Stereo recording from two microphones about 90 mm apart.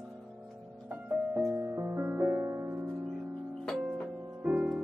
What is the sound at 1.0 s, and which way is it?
Music, 20° right (ahead or behind).